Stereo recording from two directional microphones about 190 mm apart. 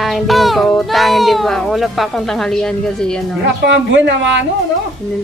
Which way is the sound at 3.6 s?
70° right (ahead or behind).